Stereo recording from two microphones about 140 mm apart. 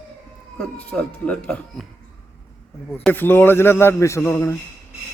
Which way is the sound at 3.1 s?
15° left (ahead or behind).